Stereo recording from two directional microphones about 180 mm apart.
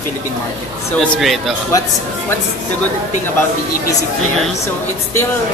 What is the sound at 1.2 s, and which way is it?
Speech, centre (ahead or behind).